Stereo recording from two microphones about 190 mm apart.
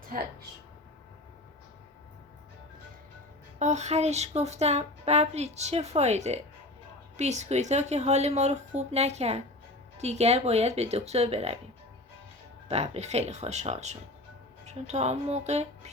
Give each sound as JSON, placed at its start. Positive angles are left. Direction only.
{"t": 3.6, "sound": "speech", "side_deg": -35}
{"t": 12.6, "sound": "speech", "side_deg": -35}